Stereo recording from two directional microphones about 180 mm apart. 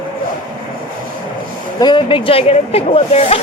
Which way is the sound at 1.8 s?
25° left (ahead or behind).